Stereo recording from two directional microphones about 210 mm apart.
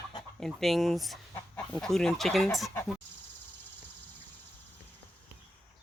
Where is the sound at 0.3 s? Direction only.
Centre (ahead or behind).